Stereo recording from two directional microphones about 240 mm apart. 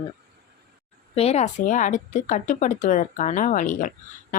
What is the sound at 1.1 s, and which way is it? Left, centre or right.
Speech, left.